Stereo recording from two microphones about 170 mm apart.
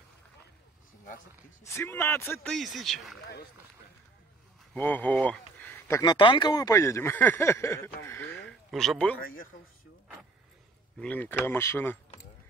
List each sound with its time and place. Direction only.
1.6 s speech: 15° left (ahead or behind)
2.5 s speech: centre (ahead or behind)
4.7 s speech: 10° left (ahead or behind)
8.5 s speech: 5° left (ahead or behind)
9.2 s a man's voice: 55° left (ahead or behind)
11.0 s speech: 10° left (ahead or behind)